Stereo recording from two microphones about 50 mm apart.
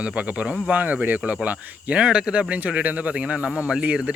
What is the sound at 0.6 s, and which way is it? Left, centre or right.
Speech, right.